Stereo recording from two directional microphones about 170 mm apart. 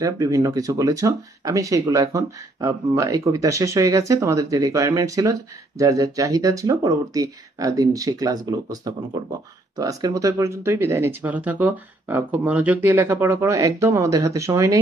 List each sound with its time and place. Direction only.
0.0 s speech: 20° right (ahead or behind)